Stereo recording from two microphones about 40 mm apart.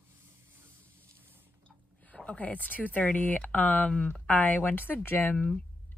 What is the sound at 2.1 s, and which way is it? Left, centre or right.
Speech, left.